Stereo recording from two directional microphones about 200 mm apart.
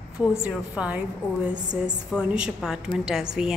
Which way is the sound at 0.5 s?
5° right (ahead or behind).